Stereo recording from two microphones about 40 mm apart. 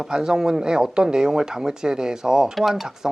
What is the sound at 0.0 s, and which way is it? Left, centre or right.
Speech, centre.